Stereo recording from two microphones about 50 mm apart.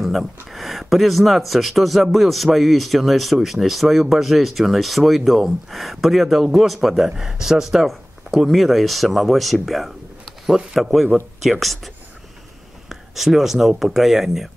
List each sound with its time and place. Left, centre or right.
0.0 s speech: centre
13.1 s speech: centre